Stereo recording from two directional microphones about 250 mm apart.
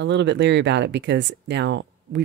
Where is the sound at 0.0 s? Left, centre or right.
Right.